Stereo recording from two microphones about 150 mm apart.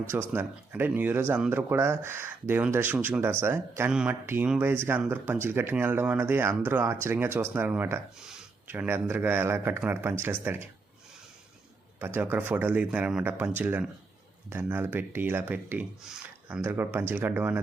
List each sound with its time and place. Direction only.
0.1 s speech: 15° right (ahead or behind)
8.2 s speech: 5° right (ahead or behind)
11.9 s speech: 15° right (ahead or behind)